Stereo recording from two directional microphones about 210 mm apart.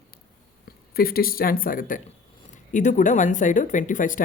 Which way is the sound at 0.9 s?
45° left (ahead or behind).